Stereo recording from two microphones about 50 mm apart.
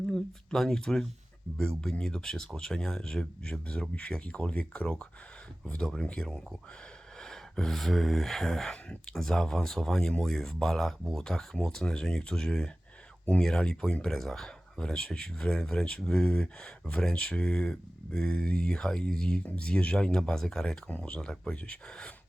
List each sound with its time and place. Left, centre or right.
0.0 s speech: centre
6.2 s speech: centre
20.9 s speech: left
21.5 s speech: left
21.8 s speech: centre